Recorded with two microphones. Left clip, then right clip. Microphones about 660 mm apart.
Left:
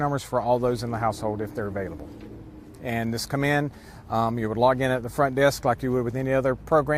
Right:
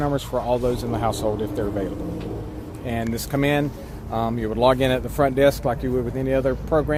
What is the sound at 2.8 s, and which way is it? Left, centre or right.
Speech, left.